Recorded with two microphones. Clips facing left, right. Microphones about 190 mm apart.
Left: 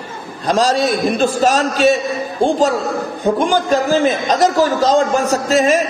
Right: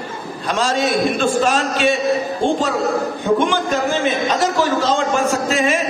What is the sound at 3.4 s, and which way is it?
A man's voice, 35° left (ahead or behind).